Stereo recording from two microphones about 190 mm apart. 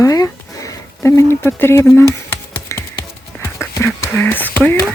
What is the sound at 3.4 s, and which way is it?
Whispering, 15° left (ahead or behind).